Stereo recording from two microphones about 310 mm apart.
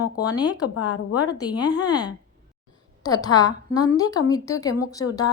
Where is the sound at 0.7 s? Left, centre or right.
Left.